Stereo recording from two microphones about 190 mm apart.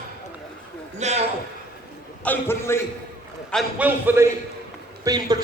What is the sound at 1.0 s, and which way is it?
Speech, 35° right (ahead or behind).